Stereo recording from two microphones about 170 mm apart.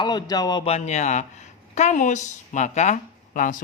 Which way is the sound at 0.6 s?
40° left (ahead or behind).